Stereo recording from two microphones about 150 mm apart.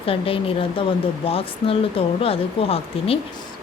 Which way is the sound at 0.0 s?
40° left (ahead or behind).